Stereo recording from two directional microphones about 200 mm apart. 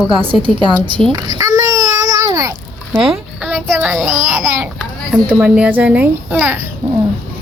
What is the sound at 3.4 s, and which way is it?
Child singing, 5° right (ahead or behind).